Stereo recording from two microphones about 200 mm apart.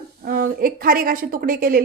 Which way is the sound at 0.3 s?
45° right (ahead or behind).